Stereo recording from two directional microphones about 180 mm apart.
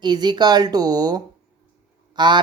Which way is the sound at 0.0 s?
25° right (ahead or behind).